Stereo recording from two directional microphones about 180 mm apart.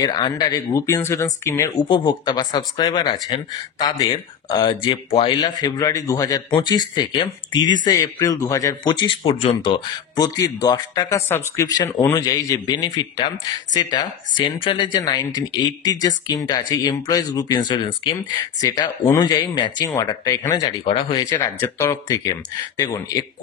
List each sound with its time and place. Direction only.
0.0 s a man's voice: 20° left (ahead or behind)